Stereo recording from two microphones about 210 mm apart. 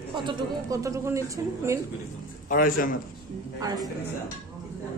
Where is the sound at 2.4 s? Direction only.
40° left (ahead or behind).